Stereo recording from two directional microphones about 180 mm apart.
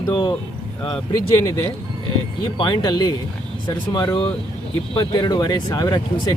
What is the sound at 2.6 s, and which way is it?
Speech, 25° left (ahead or behind).